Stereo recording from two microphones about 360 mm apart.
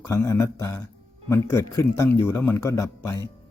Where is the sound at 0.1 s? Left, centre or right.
Centre.